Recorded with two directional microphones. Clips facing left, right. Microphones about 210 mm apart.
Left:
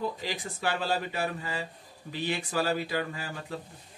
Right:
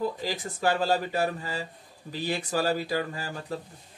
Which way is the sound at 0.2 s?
40° right (ahead or behind).